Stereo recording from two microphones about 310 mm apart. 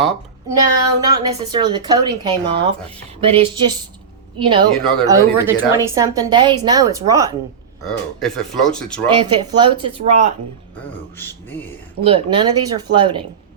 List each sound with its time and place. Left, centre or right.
1.0 s a woman's voice: centre
4.7 s speech: centre
5.0 s a woman's voice: centre
7.9 s speech: centre
9.1 s a woman's voice: centre
10.8 s speech: centre
12.0 s a woman's voice: centre